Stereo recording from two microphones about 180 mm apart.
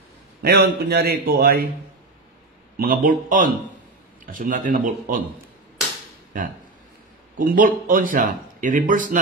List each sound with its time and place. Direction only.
0.4 s a man's voice: 65° right (ahead or behind)
2.8 s speech: 50° right (ahead or behind)
7.3 s speech: 50° right (ahead or behind)